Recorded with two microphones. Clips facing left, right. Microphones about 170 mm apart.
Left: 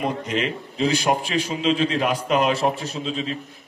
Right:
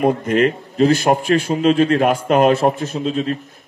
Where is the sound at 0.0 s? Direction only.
50° right (ahead or behind).